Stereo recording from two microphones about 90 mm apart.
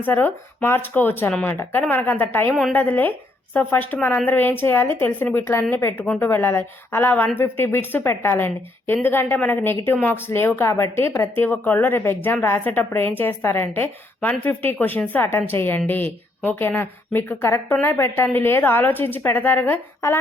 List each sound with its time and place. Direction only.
0.0 s speech: 20° left (ahead or behind)